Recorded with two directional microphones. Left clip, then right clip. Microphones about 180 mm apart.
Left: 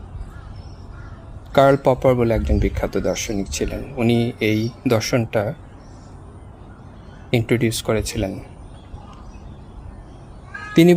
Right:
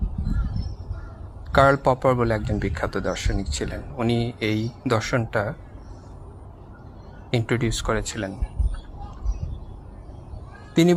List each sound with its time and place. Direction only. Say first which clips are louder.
1.5 s speech: left 3 dB; 20° left (ahead or behind)
7.3 s speech: left 5 dB; 20° left (ahead or behind)